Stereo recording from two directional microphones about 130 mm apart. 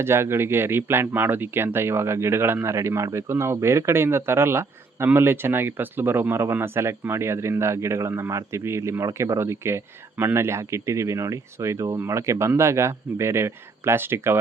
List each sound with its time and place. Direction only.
0.0 s speech: 20° right (ahead or behind)